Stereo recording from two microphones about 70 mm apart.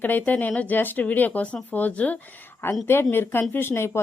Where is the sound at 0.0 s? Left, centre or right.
Left.